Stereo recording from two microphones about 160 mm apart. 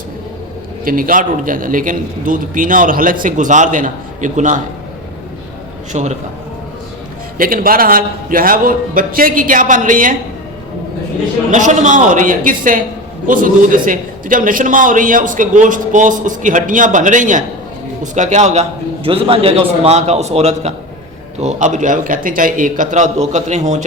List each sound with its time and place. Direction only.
0.9 s a man's voice: 60° right (ahead or behind)
5.9 s a man's voice: 45° right (ahead or behind)
7.3 s a man's voice: 65° right (ahead or behind)
11.5 s a man's voice: 50° right (ahead or behind)
19.0 s a man's voice: 35° right (ahead or behind)